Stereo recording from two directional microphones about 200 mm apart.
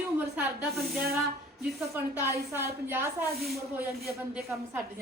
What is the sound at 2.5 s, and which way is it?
Speech, 10° right (ahead or behind).